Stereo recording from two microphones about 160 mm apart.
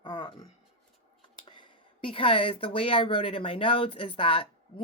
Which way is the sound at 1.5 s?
30° left (ahead or behind).